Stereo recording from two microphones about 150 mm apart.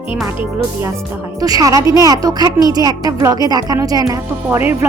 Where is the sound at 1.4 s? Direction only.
25° right (ahead or behind).